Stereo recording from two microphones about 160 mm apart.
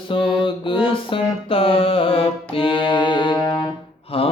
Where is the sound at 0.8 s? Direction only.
35° left (ahead or behind).